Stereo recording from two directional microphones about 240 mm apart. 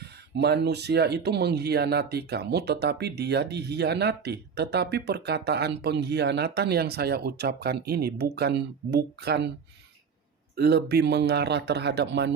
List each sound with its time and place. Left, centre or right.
0.0 s speech: right
10.6 s speech: right